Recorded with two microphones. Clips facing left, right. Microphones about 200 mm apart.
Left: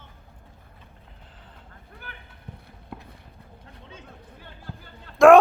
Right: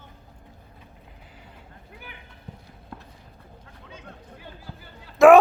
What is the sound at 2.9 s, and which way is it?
Run, 10° left (ahead or behind).